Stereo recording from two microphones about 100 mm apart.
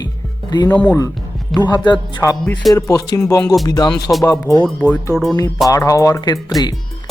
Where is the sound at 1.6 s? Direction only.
45° left (ahead or behind).